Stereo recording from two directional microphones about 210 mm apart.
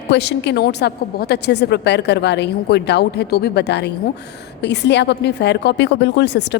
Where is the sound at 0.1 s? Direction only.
55° left (ahead or behind).